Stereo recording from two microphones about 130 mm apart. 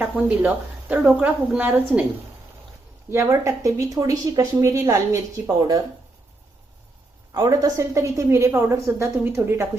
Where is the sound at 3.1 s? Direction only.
20° right (ahead or behind).